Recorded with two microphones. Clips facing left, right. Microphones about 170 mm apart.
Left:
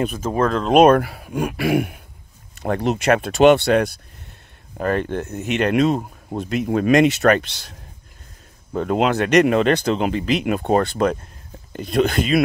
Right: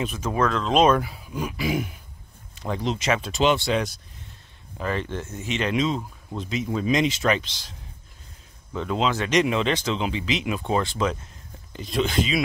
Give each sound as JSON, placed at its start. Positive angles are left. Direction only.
{"t": 0.0, "sound": "speech", "side_deg": 50}
{"t": 0.3, "sound": "speech", "side_deg": 40}
{"t": 0.7, "sound": "speech", "side_deg": 60}
{"t": 8.7, "sound": "speech", "side_deg": 55}